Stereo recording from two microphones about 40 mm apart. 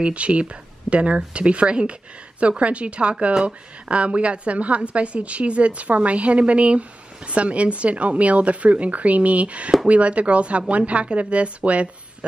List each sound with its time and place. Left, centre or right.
0.0 s a woman's voice: right